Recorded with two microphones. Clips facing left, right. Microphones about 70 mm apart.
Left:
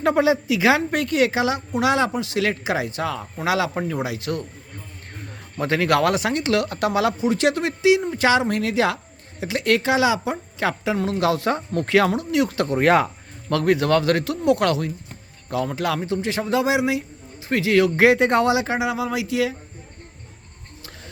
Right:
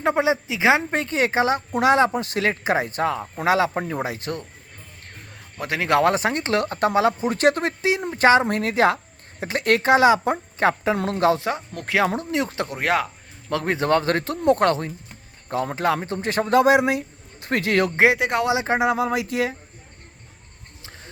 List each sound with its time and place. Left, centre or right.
0.0 s a woman's voice: right
5.5 s a man's voice: centre
5.8 s speech: right
7.3 s speech: right
11.4 s speech: centre
12.1 s speech: right
12.6 s speech: centre
13.7 s speech: right
17.9 s a woman's voice: right
18.2 s speech: centre
18.4 s a woman's voice: right
18.7 s speech: right